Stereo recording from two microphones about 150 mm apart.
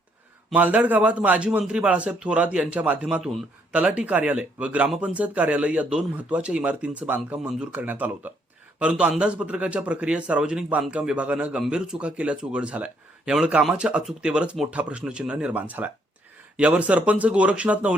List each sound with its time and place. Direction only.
0.5 s a man's voice: 10° right (ahead or behind)